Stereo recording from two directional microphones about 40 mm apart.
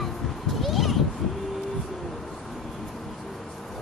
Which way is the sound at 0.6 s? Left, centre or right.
Centre.